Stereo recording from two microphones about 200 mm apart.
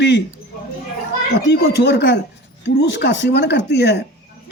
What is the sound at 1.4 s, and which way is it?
Speech, 55° left (ahead or behind).